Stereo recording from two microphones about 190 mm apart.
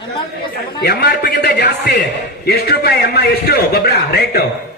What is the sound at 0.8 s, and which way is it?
A man's voice, 55° left (ahead or behind).